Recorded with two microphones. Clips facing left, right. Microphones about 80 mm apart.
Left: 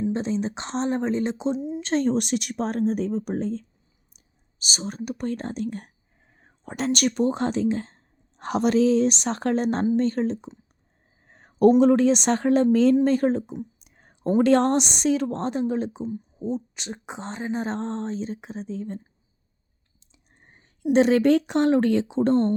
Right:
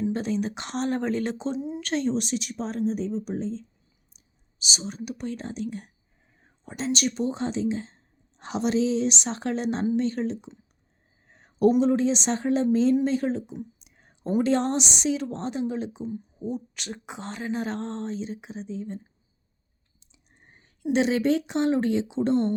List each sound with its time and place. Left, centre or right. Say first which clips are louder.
0.1 s speech: left 1 dB; left
2.0 s speech: left 4 dB; left
4.6 s a woman's voice: left 2 dB; left
6.7 s a woman's voice: left 3 dB; left
11.3 s a sound: left 4 dB; left
11.8 s speech: left 5 dB; left
13.1 s a woman's voice: left 5 dB; left
13.7 s a sound: left 2 dB; left
14.4 s a woman's voice: left 6 dB; left
16.0 s speech: left 3 dB; left
20.9 s a woman's voice: left 5 dB; left